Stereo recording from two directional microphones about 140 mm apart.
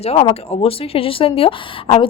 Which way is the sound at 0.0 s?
45° left (ahead or behind).